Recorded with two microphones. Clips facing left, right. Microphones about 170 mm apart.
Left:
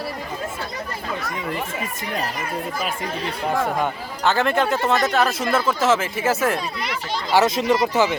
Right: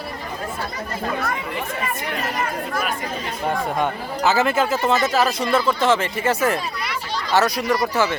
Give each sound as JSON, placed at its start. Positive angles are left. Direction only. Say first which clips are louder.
{"t": 1.0, "sound": "chatter", "louder": "right 6 dB", "side_deg": -55}
{"t": 3.8, "sound": "a man's voice", "louder": "right 2 dB", "side_deg": -5}
{"t": 7.3, "sound": "speech", "louder": "left 2 dB", "side_deg": 20}